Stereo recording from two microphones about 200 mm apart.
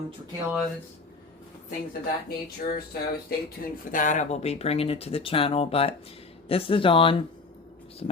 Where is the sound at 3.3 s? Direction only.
50° left (ahead or behind).